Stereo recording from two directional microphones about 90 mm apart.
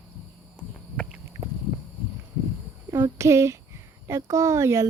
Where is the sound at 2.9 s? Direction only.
35° right (ahead or behind).